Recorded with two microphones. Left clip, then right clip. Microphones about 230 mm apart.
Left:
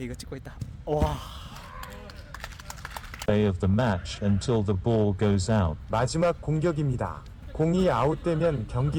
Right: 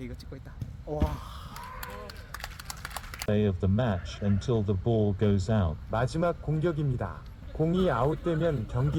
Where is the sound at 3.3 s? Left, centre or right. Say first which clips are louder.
Left 3 dB; left.